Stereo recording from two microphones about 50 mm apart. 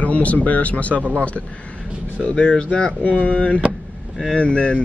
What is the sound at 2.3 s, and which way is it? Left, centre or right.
Speech, left.